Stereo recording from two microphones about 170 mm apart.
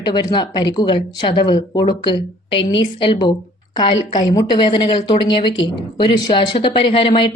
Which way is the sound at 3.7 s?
45° left (ahead or behind).